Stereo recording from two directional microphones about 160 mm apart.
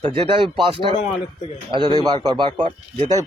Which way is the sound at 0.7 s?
30° left (ahead or behind).